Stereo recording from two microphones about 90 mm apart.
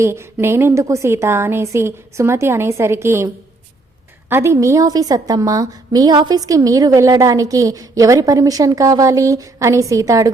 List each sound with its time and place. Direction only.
0.0 s a woman's voice: 30° right (ahead or behind)
4.3 s a woman's voice: 30° right (ahead or behind)